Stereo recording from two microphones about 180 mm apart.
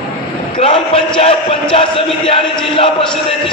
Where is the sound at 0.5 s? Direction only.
30° left (ahead or behind).